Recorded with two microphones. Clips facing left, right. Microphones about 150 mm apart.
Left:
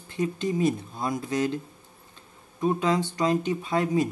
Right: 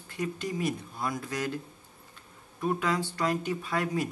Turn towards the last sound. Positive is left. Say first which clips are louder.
# left 6 dB
turn(degrees=20)  # may be behind; listen again after turning